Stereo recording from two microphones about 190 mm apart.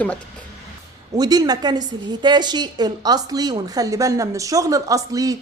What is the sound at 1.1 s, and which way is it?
A woman's voice, 20° right (ahead or behind).